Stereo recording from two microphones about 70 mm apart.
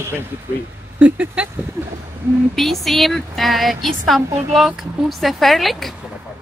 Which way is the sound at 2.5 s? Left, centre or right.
Centre.